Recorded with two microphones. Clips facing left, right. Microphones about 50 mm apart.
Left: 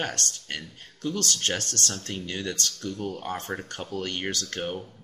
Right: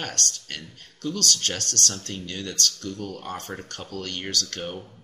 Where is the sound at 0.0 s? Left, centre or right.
Left.